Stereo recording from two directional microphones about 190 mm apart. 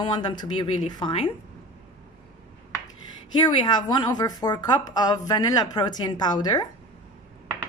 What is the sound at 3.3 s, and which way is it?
A woman's voice, 20° left (ahead or behind).